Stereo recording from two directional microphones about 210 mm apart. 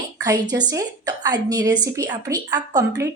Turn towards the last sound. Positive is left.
turn(degrees=-15)  # may be behind; listen again after turning